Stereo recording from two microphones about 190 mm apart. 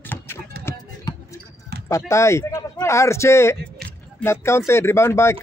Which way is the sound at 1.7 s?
55° right (ahead or behind).